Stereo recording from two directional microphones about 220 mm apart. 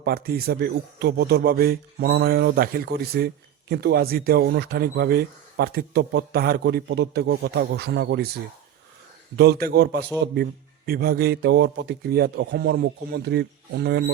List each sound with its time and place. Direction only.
0.0 s a man's voice: 45° right (ahead or behind)
9.3 s a man's voice: 50° right (ahead or behind)